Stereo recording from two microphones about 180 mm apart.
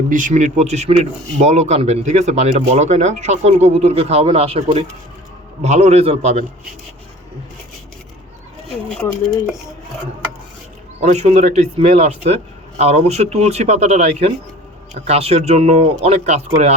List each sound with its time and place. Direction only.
0.1 s speech: 45° right (ahead or behind)
11.0 s speech: 40° right (ahead or behind)